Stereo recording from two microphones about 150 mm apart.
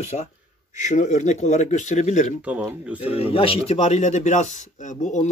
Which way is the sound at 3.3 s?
40° left (ahead or behind).